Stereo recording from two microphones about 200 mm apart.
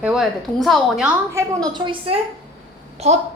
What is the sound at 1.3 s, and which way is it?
A woman's voice, 20° right (ahead or behind).